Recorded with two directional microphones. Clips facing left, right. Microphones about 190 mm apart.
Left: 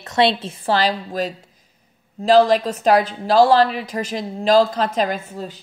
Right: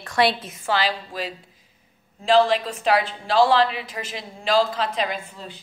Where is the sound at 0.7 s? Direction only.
40° left (ahead or behind).